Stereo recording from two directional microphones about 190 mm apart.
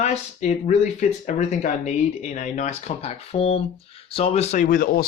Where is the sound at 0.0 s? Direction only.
35° left (ahead or behind).